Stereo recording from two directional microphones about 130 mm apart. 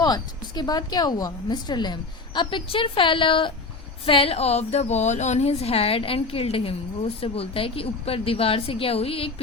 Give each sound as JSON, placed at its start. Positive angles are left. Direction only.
{"t": 0.0, "sound": "a woman's voice", "side_deg": 30}